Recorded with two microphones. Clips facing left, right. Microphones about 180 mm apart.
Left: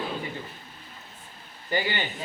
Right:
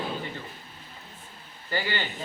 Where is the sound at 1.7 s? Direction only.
20° left (ahead or behind).